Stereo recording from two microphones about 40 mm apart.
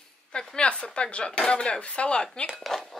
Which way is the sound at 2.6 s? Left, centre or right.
Centre.